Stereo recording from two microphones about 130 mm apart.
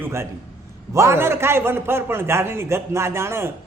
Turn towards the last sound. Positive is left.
turn(degrees=-20)  # may be behind; listen again after turning